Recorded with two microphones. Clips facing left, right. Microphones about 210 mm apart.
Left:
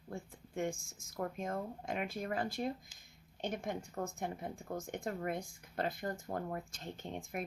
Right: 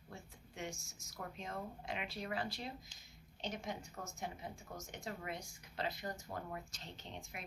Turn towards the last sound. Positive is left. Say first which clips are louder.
# left 9 dB
turn(degrees=50)  # may be behind; listen again after turning